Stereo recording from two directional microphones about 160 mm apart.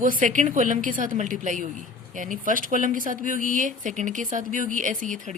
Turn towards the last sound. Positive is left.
turn(degrees=-55)  # may be behind; listen again after turning